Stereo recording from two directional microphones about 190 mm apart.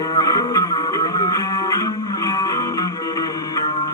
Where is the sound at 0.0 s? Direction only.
20° left (ahead or behind).